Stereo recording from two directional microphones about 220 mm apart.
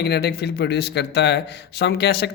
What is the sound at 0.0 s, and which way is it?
Speech, 45° left (ahead or behind).